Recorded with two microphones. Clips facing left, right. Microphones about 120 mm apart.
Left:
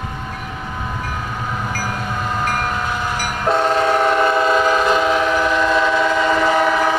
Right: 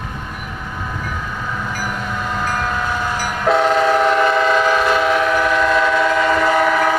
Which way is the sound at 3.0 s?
15° left (ahead or behind).